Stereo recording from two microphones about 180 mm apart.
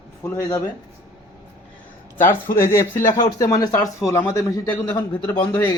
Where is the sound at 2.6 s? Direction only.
15° left (ahead or behind).